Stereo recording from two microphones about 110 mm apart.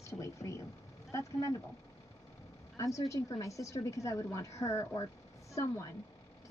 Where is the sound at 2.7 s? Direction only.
30° left (ahead or behind).